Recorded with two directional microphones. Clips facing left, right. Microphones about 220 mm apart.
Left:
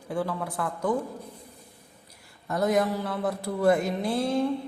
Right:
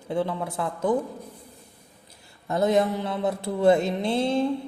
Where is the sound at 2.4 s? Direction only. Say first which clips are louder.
Right 3 dB; 25° right (ahead or behind).